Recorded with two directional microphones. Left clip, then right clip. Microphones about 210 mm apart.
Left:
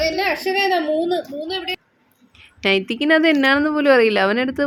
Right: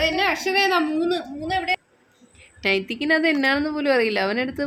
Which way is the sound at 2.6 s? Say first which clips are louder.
Left 4 dB; 5° left (ahead or behind).